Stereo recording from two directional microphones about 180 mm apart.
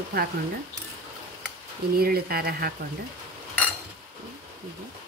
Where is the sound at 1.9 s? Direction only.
55° right (ahead or behind).